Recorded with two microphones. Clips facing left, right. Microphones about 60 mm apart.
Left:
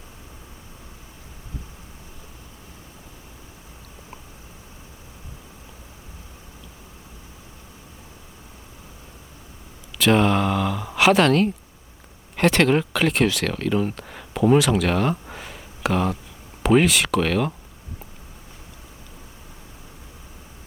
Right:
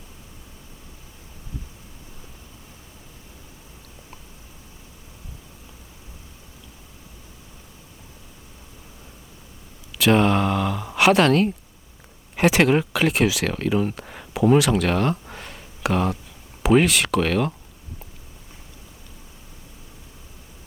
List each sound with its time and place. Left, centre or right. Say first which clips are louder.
10.0 s speech: even; centre